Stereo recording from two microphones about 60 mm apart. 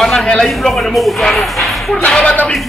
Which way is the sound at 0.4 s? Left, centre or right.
Centre.